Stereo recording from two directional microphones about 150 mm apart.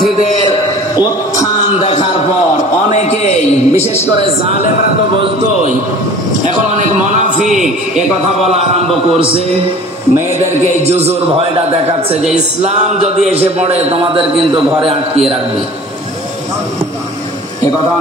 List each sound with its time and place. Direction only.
1.8 s a man's voice: 40° left (ahead or behind)
2.9 s a sound: 45° left (ahead or behind)
8.5 s a man's voice: 45° right (ahead or behind)
10.9 s a man's voice: 45° right (ahead or behind)
12.6 s a man's voice: 45° right (ahead or behind)